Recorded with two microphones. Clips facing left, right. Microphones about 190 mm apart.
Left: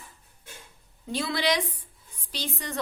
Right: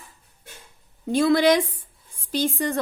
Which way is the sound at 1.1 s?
50° right (ahead or behind).